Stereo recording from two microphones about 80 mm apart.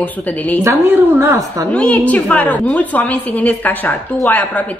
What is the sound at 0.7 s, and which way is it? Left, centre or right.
Speech, right.